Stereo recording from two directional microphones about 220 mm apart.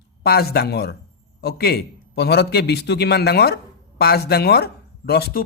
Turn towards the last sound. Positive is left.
turn(degrees=45)  # may be behind; listen again after turning